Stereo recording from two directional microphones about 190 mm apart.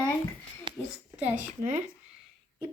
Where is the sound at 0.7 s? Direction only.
25° right (ahead or behind).